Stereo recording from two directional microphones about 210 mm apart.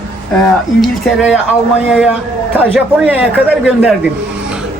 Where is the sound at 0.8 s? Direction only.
5° right (ahead or behind).